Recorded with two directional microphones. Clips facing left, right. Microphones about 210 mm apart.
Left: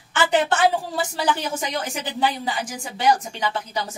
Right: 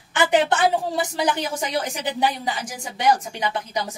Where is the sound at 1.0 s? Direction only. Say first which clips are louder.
Right 1 dB; 15° right (ahead or behind).